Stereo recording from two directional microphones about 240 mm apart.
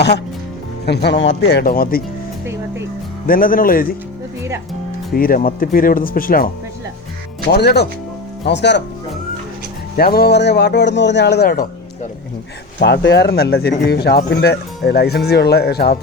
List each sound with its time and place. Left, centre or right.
0.9 s speech: left
3.2 s speech: left
5.1 s speech: left
7.5 s speech: left
10.0 s speech: left
12.8 s speech: left